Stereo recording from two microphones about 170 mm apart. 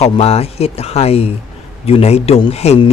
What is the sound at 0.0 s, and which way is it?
A man's voice, 35° left (ahead or behind).